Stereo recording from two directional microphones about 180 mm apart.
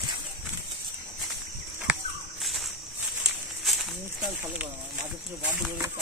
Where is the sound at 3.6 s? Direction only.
Centre (ahead or behind).